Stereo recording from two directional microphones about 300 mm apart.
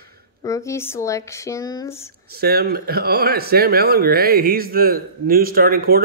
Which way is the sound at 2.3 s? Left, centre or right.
Right.